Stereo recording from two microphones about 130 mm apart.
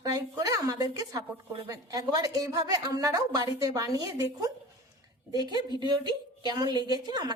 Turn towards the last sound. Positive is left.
turn(degrees=-35)  # may be behind; listen again after turning